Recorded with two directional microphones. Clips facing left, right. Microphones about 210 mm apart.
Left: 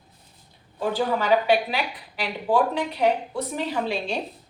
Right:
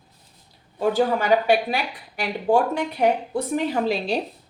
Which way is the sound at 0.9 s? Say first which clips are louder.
Right 2 dB; 45° right (ahead or behind).